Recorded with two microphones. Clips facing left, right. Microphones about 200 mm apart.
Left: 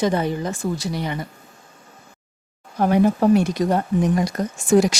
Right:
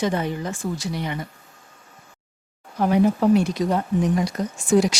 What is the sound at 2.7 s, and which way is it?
Speech, 45° left (ahead or behind).